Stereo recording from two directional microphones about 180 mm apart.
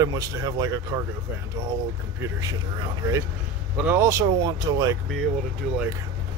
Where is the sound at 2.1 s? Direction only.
15° right (ahead or behind).